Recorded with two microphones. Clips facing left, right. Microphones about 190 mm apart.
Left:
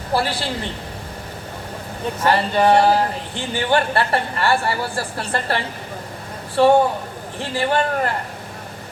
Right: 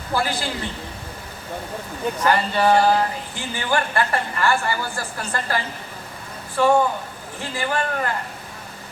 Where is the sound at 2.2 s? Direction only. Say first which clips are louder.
Left 3 dB; 30° left (ahead or behind).